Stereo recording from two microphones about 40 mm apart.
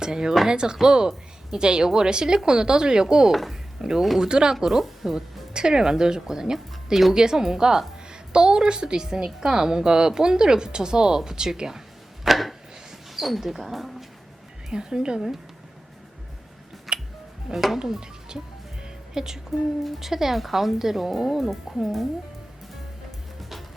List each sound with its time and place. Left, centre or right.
0.0 s a woman's voice: centre
4.6 s a woman's voice: centre
12.2 s chopping: centre
13.1 s a woman's voice: centre
14.7 s a woman's voice: centre
16.9 s music: centre
17.5 s a woman's voice: centre
23.4 s music: centre